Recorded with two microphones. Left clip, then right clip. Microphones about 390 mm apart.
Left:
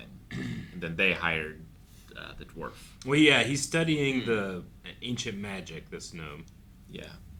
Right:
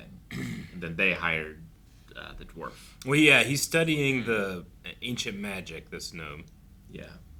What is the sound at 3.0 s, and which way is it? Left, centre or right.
A man's voice, centre.